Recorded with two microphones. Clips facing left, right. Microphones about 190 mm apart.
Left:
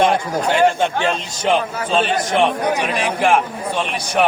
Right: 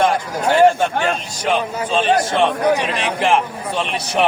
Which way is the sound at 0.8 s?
20° left (ahead or behind).